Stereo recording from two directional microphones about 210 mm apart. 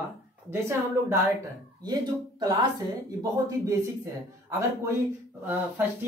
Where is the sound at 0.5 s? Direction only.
10° right (ahead or behind).